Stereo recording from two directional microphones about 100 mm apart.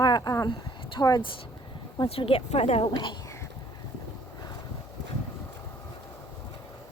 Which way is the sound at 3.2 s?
30° left (ahead or behind).